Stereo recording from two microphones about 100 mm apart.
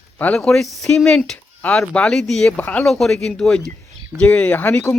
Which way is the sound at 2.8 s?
5° left (ahead or behind).